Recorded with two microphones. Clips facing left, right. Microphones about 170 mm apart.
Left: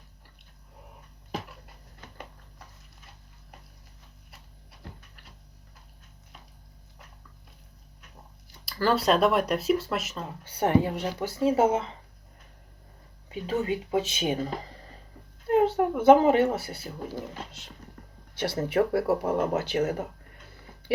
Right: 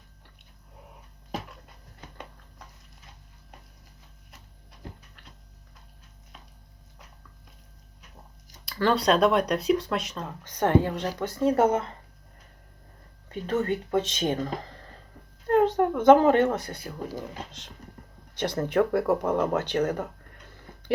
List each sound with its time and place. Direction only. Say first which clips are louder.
8.6 s speech: right 1 dB; 5° left (ahead or behind)
13.2 s speech: right 1 dB; 10° left (ahead or behind)
18.3 s speech: right 1 dB; 10° left (ahead or behind)